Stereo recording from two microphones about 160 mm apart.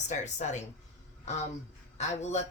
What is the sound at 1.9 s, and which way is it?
Speech, 45° left (ahead or behind).